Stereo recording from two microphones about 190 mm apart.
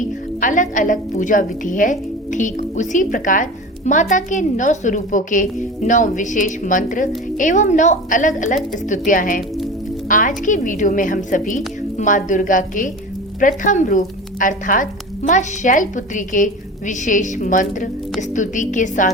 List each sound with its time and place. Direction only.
0.0 s a woman's voice: 45° left (ahead or behind)